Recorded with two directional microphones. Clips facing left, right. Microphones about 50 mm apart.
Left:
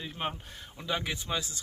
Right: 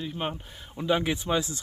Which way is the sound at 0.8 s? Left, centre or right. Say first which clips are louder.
Right 8 dB; centre.